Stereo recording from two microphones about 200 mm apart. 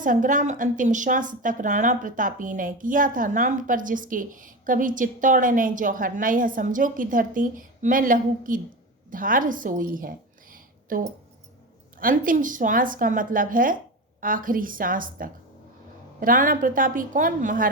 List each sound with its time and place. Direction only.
0.0 s a woman's voice: 40° right (ahead or behind)